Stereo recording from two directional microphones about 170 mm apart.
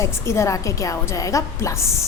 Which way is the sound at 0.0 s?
15° left (ahead or behind).